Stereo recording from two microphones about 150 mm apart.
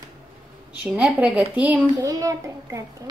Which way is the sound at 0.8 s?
5° right (ahead or behind).